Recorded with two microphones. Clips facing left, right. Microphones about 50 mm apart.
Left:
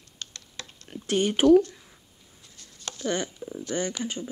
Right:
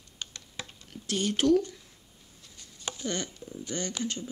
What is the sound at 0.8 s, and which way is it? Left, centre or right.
Speech, left.